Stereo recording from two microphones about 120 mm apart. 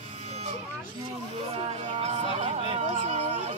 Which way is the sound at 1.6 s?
65° right (ahead or behind).